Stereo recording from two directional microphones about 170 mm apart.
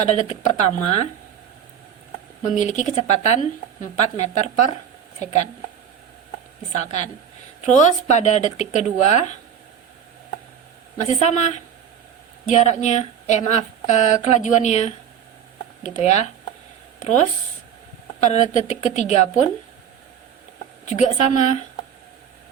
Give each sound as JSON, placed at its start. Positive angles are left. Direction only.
{"t": 0.0, "sound": "speech", "side_deg": 40}
{"t": 2.6, "sound": "a woman's voice", "side_deg": 45}
{"t": 6.7, "sound": "a woman's voice", "side_deg": 45}
{"t": 11.0, "sound": "a woman's voice", "side_deg": 45}
{"t": 20.8, "sound": "a woman's voice", "side_deg": 45}